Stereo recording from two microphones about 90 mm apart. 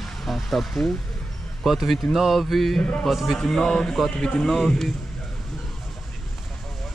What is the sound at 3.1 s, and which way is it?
Speech, centre (ahead or behind).